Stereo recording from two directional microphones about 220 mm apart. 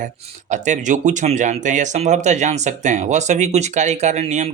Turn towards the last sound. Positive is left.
turn(degrees=-30)  # may be behind; listen again after turning